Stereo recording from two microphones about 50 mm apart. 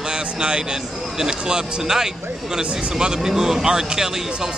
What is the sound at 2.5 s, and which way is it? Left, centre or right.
Speech, right.